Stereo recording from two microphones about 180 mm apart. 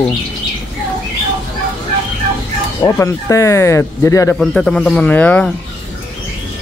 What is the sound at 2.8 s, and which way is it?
Speech, 15° left (ahead or behind).